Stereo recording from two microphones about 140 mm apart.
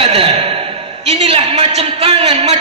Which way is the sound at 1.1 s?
45° right (ahead or behind).